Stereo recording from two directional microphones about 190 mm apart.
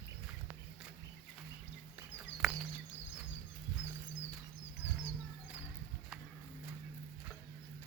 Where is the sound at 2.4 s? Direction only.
Centre (ahead or behind).